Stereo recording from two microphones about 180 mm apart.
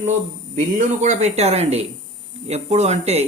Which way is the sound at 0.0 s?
40° right (ahead or behind).